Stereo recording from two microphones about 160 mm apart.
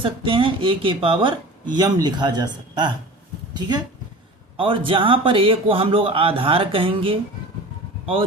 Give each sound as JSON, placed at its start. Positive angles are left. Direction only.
{"t": 0.0, "sound": "a man's voice", "side_deg": -35}